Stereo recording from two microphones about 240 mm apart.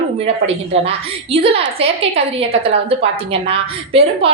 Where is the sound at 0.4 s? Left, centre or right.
Right.